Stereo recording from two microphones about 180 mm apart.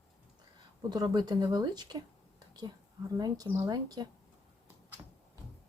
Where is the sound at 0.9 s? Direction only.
25° right (ahead or behind).